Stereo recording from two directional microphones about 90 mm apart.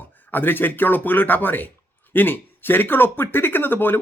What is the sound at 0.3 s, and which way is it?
Speech, 20° left (ahead or behind).